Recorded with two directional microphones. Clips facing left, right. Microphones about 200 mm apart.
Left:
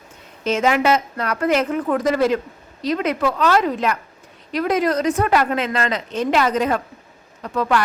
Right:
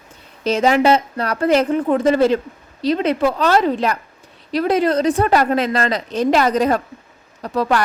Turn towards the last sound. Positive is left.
turn(degrees=-35)  # may be behind; listen again after turning